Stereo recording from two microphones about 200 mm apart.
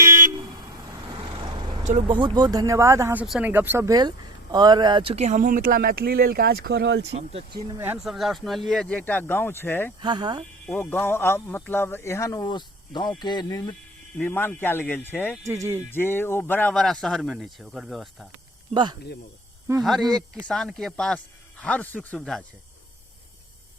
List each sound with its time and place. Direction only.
1.2 s vehicle: 25° right (ahead or behind)
2.0 s speech: 25° right (ahead or behind); by 7.1 s 60° right (ahead or behind)
7.1 s speech: 30° right (ahead or behind)
7.8 s speech: 5° right (ahead or behind); by 9.9 s 10° left (ahead or behind)
10.0 s speech: 20° right (ahead or behind)
10.7 s a man's voice: 10° left (ahead or behind)
15.4 s speech: 15° right (ahead or behind)
15.9 s speech: 10° left (ahead or behind)
18.7 s speech: 20° right (ahead or behind)
19.8 s a man's voice: centre (ahead or behind)